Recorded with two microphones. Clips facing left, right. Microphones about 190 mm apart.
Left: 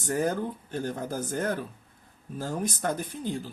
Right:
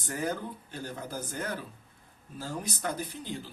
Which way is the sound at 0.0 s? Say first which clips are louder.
Left 6 dB; 45° left (ahead or behind).